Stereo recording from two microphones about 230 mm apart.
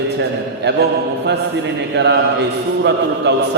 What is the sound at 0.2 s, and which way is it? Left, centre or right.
Mantra, right.